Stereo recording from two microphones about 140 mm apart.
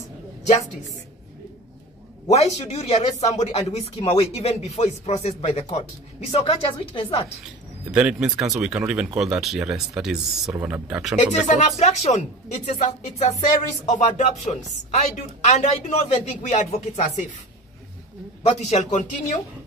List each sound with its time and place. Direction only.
2.2 s speech: 50° left (ahead or behind)
6.3 s speech: 40° left (ahead or behind)
7.4 s speech: 5° right (ahead or behind)
11.1 s speech: 55° left (ahead or behind)
18.5 s speech: 55° left (ahead or behind)